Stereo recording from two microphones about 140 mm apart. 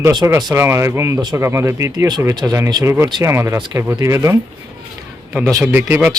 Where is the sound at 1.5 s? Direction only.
20° right (ahead or behind).